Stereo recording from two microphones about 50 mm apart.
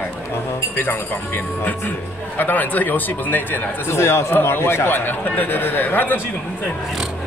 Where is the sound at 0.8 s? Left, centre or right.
Left.